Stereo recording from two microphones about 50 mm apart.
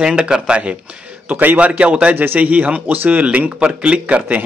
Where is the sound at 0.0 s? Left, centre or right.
Centre.